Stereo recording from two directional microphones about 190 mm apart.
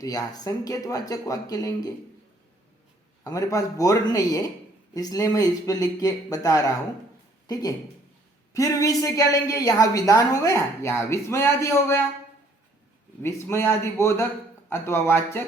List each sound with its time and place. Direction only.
0.0 s speech: 20° left (ahead or behind)
3.2 s a woman's voice: 15° left (ahead or behind)
13.2 s a woman's voice: 15° left (ahead or behind)